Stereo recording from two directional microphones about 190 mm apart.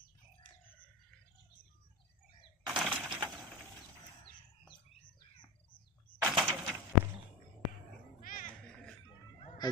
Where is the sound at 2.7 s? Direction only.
5° right (ahead or behind).